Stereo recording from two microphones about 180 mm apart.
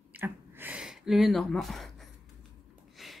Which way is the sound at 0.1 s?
10° right (ahead or behind).